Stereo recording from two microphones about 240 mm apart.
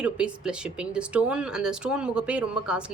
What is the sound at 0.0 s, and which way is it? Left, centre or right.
Speech, centre.